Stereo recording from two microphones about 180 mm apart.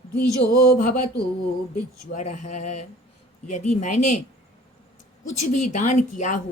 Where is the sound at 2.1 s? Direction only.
40° left (ahead or behind).